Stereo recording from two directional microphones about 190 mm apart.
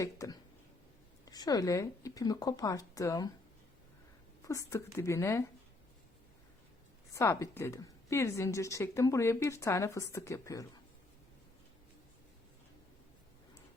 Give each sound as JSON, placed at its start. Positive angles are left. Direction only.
{"t": 0.0, "sound": "a woman's voice", "side_deg": 15}
{"t": 4.4, "sound": "a woman's voice", "side_deg": 15}
{"t": 7.1, "sound": "a woman's voice", "side_deg": 15}